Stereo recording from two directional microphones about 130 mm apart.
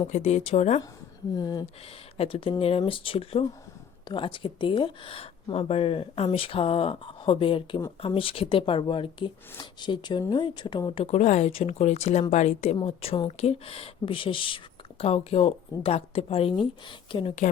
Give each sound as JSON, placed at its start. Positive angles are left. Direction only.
{"t": 0.1, "sound": "speech", "side_deg": 60}
{"t": 1.4, "sound": "speech", "side_deg": 30}
{"t": 2.1, "sound": "a woman's voice", "side_deg": 45}
{"t": 11.0, "sound": "a woman's voice", "side_deg": 60}